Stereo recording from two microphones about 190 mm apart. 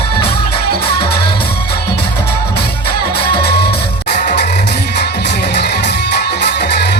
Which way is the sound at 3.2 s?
55° left (ahead or behind).